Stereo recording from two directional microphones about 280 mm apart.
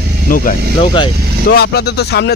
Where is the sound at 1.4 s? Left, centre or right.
Left.